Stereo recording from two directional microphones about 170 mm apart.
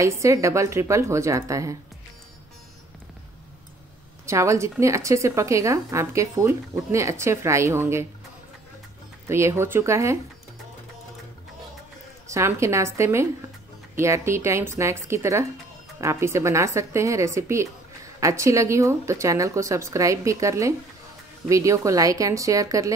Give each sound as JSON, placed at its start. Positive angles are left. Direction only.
{"t": 0.0, "sound": "a woman's voice", "side_deg": -15}
{"t": 4.3, "sound": "a woman's voice", "side_deg": -15}
{"t": 9.3, "sound": "a woman's voice", "side_deg": -15}
{"t": 12.3, "sound": "a woman's voice", "side_deg": -15}